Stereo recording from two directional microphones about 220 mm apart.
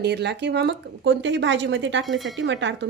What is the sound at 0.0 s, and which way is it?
Speech, 50° right (ahead or behind).